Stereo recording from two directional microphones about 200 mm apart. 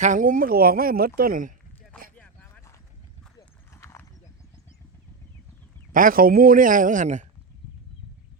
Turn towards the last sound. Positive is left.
turn(degrees=-40)  # may be behind; listen again after turning